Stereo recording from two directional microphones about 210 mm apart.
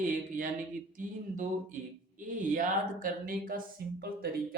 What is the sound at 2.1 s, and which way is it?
Speech, 40° right (ahead or behind).